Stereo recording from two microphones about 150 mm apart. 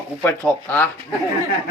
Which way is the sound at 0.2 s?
10° left (ahead or behind).